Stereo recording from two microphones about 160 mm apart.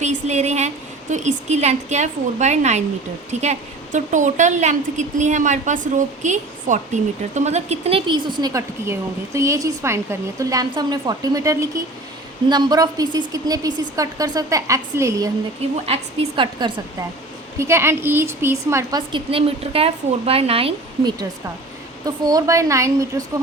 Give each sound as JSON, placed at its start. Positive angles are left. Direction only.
{"t": 0.0, "sound": "a sound", "side_deg": -45}
{"t": 1.1, "sound": "a woman's voice", "side_deg": -50}
{"t": 15.9, "sound": "a woman's voice", "side_deg": -35}
{"t": 17.6, "sound": "a woman's voice", "side_deg": -15}
{"t": 22.0, "sound": "a woman's voice", "side_deg": -25}